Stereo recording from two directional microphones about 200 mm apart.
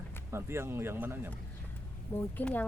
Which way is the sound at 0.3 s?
10° right (ahead or behind).